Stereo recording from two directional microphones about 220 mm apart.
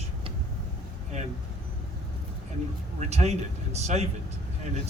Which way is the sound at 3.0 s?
30° right (ahead or behind).